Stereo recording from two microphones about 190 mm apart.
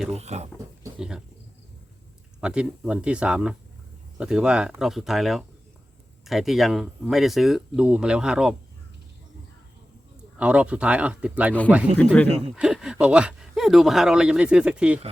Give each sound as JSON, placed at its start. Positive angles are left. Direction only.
{"t": 0.1, "sound": "speech", "side_deg": -35}
{"t": 0.9, "sound": "speech", "side_deg": -5}
{"t": 2.4, "sound": "speech", "side_deg": -5}
{"t": 10.3, "sound": "speech", "side_deg": -5}
{"t": 11.9, "sound": "speech", "side_deg": 5}